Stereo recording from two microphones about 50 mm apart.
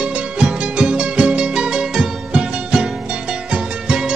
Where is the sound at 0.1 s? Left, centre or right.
Right.